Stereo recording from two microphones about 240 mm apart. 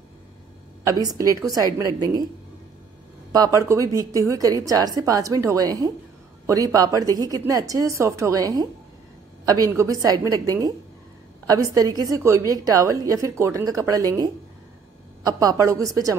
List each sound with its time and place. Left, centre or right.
0.8 s a woman's voice: centre
3.3 s a woman's voice: centre